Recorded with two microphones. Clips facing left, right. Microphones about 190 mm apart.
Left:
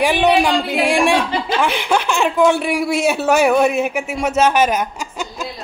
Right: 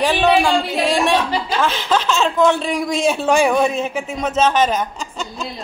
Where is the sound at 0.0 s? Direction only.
15° left (ahead or behind).